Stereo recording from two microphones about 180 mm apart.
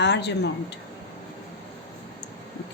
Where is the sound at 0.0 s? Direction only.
75° left (ahead or behind).